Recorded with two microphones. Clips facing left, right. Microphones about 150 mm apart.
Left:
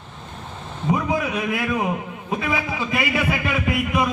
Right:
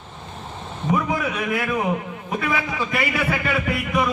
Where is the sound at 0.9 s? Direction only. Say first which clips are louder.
Left 1 dB; 20° left (ahead or behind).